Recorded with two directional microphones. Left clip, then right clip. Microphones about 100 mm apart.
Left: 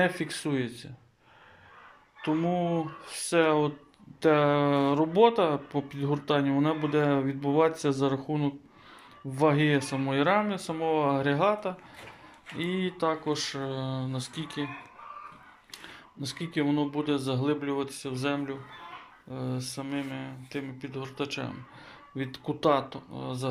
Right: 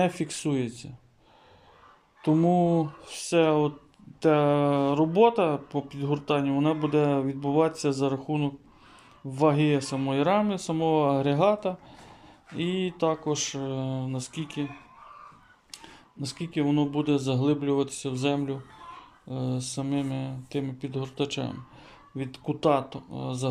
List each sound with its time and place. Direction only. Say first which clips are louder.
0.0 s speech: right 1 dB; 20° right (ahead or behind)
2.2 s speech: right 5 dB; 45° right (ahead or behind)
3.0 s speech: left 1 dB; 25° right (ahead or behind)
16.2 s speech: right 1 dB; 15° right (ahead or behind); by 21.5 s 35° right (ahead or behind)
22.1 s speech: right 1 dB; 15° right (ahead or behind)